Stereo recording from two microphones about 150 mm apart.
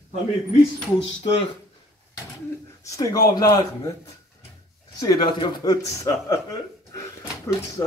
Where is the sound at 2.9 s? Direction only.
25° left (ahead or behind).